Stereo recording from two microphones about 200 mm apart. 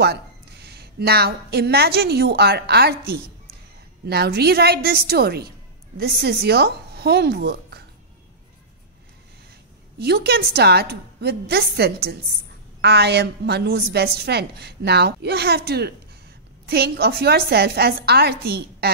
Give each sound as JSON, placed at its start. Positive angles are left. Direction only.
{"t": 0.0, "sound": "a woman's voice", "side_deg": -55}
{"t": 4.0, "sound": "a woman's voice", "side_deg": -55}
{"t": 9.9, "sound": "a woman's voice", "side_deg": -55}